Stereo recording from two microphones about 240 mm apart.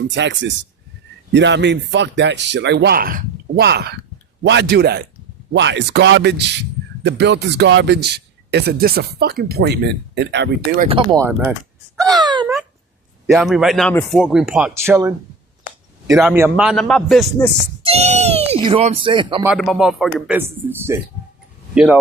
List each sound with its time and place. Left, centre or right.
0.1 s speech: right
10.8 s speech: right
13.3 s speech: centre
16.2 s speech: centre
17.8 s speech: right
19.5 s speech: centre